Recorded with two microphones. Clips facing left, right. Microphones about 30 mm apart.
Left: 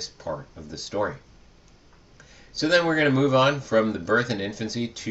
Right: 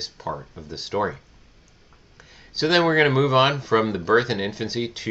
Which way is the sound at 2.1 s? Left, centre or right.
Right.